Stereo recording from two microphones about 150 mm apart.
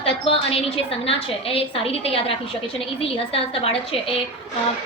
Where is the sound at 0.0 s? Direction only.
40° left (ahead or behind).